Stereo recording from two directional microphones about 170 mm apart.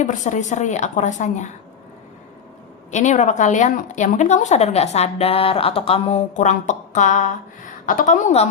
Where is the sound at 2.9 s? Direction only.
45° left (ahead or behind).